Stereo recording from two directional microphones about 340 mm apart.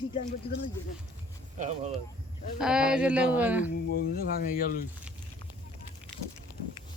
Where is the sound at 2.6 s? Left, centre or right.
Centre.